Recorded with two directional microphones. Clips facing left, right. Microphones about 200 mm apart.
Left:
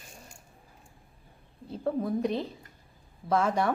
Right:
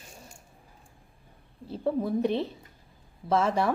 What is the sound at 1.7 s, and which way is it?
Speech, 5° right (ahead or behind).